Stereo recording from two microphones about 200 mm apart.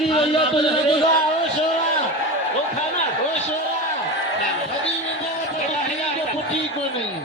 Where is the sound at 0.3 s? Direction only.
25° left (ahead or behind).